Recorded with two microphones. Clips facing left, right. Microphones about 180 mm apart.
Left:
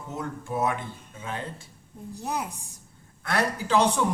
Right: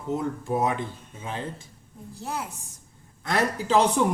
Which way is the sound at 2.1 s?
15° left (ahead or behind).